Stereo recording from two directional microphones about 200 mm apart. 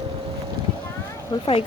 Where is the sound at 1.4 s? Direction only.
25° left (ahead or behind).